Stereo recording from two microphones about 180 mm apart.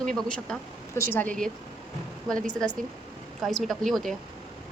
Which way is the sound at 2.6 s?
5° left (ahead or behind).